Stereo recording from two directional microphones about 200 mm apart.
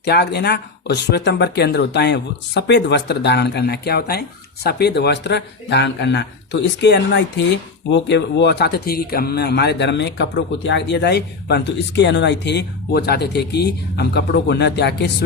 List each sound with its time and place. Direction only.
0.0 s speech: 55° left (ahead or behind)